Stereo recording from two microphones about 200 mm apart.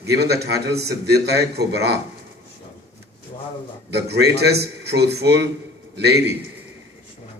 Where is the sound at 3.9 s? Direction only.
55° right (ahead or behind).